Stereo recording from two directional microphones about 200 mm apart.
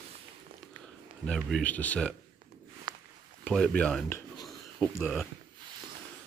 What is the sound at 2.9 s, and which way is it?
Walk, 20° right (ahead or behind).